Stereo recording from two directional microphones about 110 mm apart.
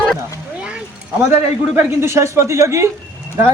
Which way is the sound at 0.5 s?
10° right (ahead or behind).